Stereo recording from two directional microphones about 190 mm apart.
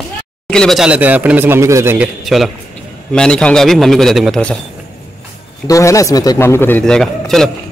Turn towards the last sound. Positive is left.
turn(degrees=0)  # may be behind; listen again after turning